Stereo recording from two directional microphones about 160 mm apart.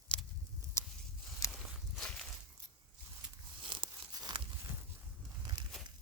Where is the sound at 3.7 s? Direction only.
30° right (ahead or behind).